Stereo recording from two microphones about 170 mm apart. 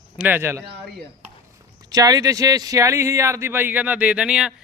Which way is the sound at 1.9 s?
20° right (ahead or behind).